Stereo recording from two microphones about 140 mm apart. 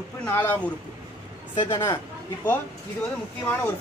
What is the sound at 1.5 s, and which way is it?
Speech, 30° left (ahead or behind).